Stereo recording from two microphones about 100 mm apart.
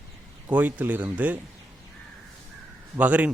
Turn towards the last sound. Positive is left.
turn(degrees=-15)  # may be behind; listen again after turning